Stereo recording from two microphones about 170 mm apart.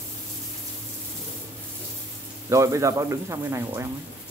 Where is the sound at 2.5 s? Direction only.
20° right (ahead or behind).